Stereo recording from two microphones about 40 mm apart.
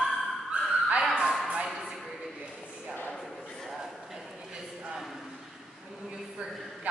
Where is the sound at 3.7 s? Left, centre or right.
Centre.